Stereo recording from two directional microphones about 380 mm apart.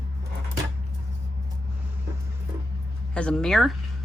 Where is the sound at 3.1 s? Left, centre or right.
Centre.